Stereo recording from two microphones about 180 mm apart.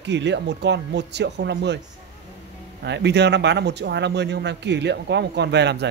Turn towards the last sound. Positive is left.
turn(degrees=-70)  # may be behind; listen again after turning